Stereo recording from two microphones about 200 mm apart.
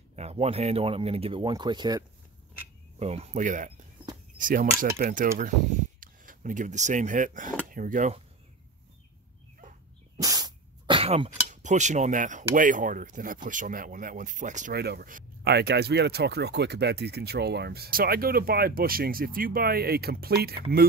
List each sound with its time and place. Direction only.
0.1 s speech: 30° right (ahead or behind)
3.0 s speech: 30° right (ahead or behind)
10.2 s speech: 20° right (ahead or behind); by 14.8 s 40° right (ahead or behind)
14.8 s speech: 50° right (ahead or behind)